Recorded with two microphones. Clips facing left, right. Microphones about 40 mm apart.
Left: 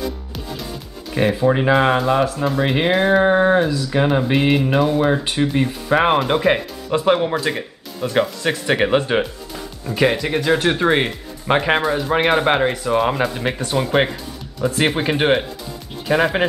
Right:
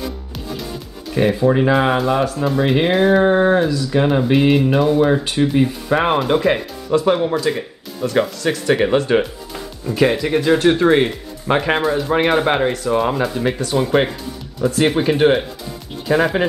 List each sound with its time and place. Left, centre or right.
1.1 s speech: centre
6.9 s speech: left
14.9 s speech: centre